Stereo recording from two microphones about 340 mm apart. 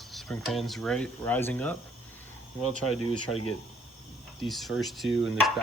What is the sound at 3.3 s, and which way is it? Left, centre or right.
Speech, left.